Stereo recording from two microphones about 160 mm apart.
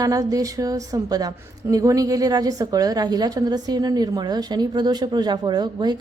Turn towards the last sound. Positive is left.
turn(degrees=-25)  # may be behind; listen again after turning